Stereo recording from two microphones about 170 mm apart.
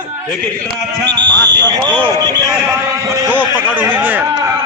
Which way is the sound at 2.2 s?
25° right (ahead or behind).